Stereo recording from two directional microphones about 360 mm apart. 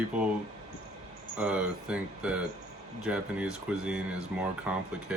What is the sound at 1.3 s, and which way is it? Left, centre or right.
Speech, centre.